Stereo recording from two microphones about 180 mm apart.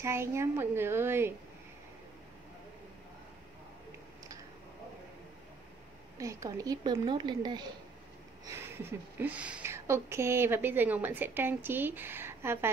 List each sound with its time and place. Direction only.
0.0 s speech: 15° right (ahead or behind)
6.1 s speech: 15° right (ahead or behind)
8.5 s speech: 15° right (ahead or behind)